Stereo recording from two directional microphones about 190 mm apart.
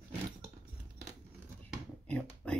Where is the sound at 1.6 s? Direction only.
5° left (ahead or behind).